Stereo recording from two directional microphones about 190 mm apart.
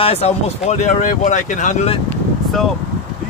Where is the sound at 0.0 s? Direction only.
35° left (ahead or behind).